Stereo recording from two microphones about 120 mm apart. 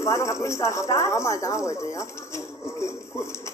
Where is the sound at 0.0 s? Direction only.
25° left (ahead or behind).